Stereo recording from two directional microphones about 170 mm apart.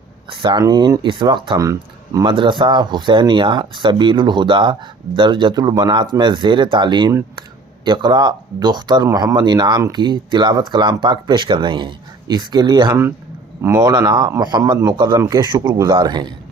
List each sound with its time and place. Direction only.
0.3 s speech: 30° right (ahead or behind)
12.9 s a man's voice: 15° right (ahead or behind)